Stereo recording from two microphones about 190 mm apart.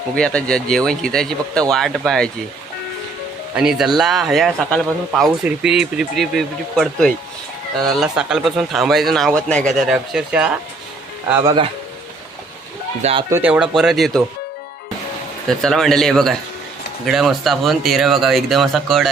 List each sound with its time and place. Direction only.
0.2 s speech: 5° left (ahead or behind)
3.5 s speech: 5° right (ahead or behind)
11.3 s speech: 20° right (ahead or behind)
13.0 s speech: 30° right (ahead or behind)
13.3 s speech: 5° right (ahead or behind)
15.4 s speech: centre (ahead or behind)